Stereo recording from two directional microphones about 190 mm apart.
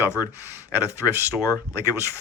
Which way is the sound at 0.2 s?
10° right (ahead or behind).